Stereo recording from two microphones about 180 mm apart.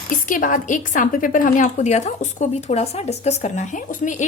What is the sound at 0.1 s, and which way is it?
A woman's voice, 50° left (ahead or behind).